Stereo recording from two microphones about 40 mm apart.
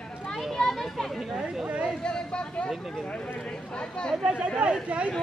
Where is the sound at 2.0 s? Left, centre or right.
Left.